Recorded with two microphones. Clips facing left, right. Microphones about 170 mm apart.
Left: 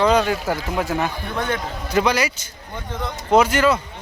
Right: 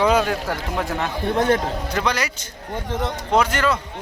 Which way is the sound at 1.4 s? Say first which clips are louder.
Right 6 dB; 40° right (ahead or behind).